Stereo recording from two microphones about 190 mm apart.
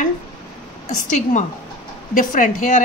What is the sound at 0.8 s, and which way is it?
A woman's voice, 40° left (ahead or behind).